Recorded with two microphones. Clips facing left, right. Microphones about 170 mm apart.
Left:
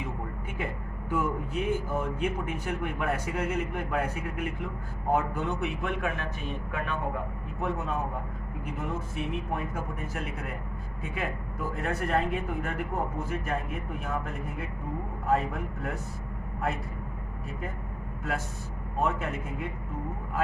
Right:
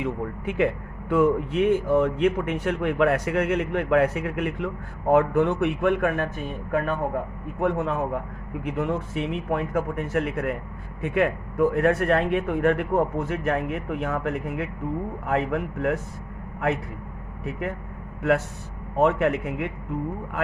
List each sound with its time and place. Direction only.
0.0 s a sound: 75° right (ahead or behind)
1.1 s a man's voice: 75° right (ahead or behind); by 6.2 s 55° right (ahead or behind)
6.7 s speech: 45° right (ahead or behind)
7.6 s a man's voice: 70° right (ahead or behind)
17.4 s speech: 85° right
18.2 s a man's voice: 70° right (ahead or behind)